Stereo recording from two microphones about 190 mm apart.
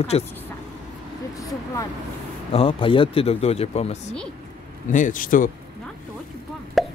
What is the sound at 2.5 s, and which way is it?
Speech, 30° left (ahead or behind).